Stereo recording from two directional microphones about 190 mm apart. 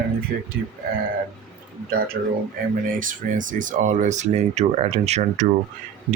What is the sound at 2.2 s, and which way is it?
Speech, 60° right (ahead or behind).